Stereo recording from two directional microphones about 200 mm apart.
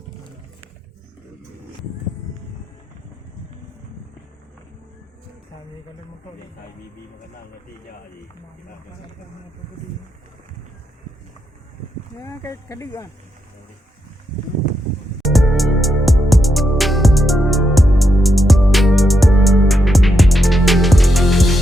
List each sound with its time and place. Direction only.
12.2 s speech: 15° left (ahead or behind)
15.2 s music: centre (ahead or behind)